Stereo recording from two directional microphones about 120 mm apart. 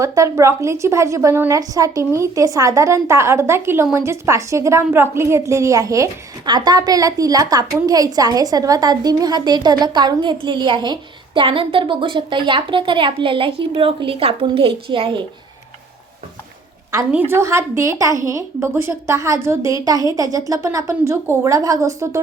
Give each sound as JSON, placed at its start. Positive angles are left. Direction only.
{"t": 0.0, "sound": "a woman's voice", "side_deg": -25}
{"t": 17.1, "sound": "a woman's voice", "side_deg": -15}